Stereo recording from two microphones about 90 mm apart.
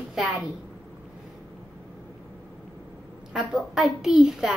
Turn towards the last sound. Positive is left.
turn(degrees=-5)  # may be behind; listen again after turning